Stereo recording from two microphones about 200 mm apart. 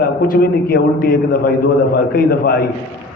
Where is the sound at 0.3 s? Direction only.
45° left (ahead or behind).